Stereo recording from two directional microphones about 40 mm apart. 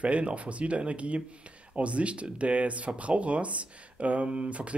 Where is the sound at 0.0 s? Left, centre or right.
Right.